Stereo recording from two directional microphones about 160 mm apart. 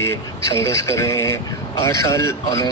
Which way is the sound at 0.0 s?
15° left (ahead or behind).